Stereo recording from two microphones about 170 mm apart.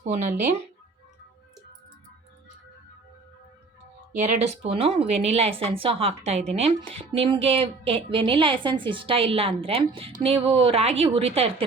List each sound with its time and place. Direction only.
0.0 s speech: 45° right (ahead or behind)
4.2 s speech: 40° right (ahead or behind)